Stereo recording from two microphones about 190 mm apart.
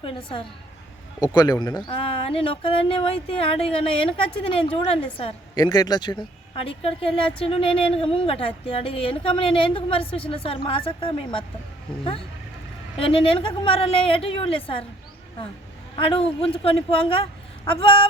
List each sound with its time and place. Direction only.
0.0 s a woman's voice: 25° left (ahead or behind)
13.0 s a woman's voice: 30° left (ahead or behind)
16.0 s a woman's voice: 30° left (ahead or behind)